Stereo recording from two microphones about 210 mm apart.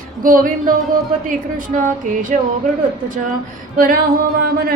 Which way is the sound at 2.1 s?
40° right (ahead or behind).